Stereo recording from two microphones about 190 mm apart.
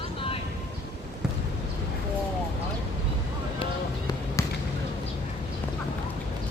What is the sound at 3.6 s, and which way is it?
Basketball bounce, 20° left (ahead or behind).